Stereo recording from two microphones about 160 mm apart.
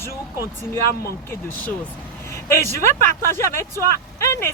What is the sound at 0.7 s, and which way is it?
Speech, 15° left (ahead or behind).